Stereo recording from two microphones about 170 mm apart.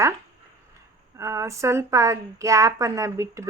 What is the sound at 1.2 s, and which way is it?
A woman's voice, 20° right (ahead or behind).